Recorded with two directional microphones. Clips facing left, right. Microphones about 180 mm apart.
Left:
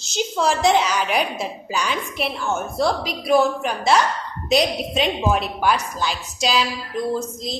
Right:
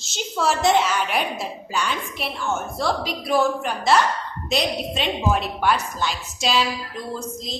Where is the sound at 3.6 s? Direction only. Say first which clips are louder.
Left 1 dB; centre (ahead or behind).